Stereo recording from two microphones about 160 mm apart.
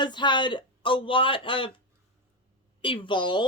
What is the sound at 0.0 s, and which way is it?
Speech, 30° left (ahead or behind).